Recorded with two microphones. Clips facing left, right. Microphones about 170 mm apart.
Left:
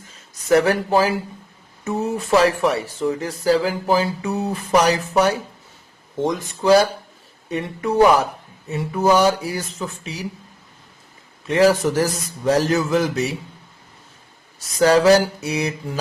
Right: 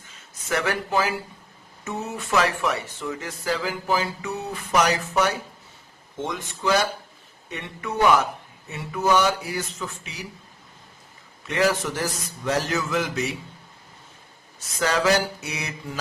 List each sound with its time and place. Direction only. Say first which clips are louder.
0.0 s speech: left 2 dB; 35° left (ahead or behind)
11.4 s speech: left 7 dB; 35° left (ahead or behind)
14.8 s speech: left 8 dB; 35° left (ahead or behind)